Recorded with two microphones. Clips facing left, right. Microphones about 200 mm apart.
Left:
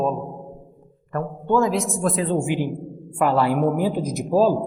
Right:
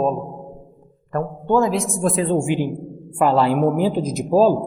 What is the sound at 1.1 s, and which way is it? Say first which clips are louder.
A man's voice: right 2 dB; 30° right (ahead or behind).